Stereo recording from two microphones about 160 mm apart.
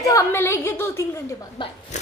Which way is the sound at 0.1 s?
15° left (ahead or behind).